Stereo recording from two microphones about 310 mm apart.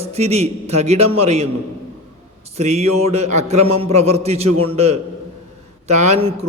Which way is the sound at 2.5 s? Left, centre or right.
Right.